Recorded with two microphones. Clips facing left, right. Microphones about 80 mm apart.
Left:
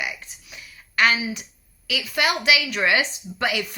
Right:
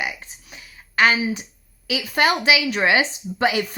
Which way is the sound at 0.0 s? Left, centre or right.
Right.